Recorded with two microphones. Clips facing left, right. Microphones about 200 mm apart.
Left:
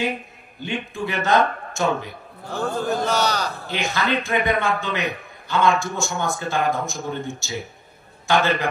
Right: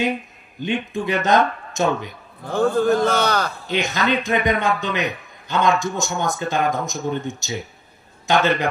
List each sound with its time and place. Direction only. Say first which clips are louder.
0.6 s speech: right 4 dB; 20° right (ahead or behind)
2.4 s a man's voice: right 7 dB; 55° right (ahead or behind)
3.6 s a man's voice: right 2 dB; 20° right (ahead or behind)